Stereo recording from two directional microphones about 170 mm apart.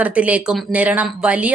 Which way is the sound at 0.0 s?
10° right (ahead or behind).